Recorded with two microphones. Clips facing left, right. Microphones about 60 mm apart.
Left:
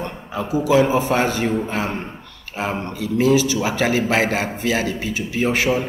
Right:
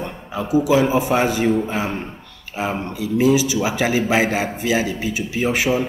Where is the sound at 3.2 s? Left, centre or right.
Centre.